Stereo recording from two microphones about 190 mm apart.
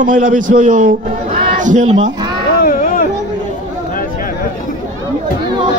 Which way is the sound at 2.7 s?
45° left (ahead or behind).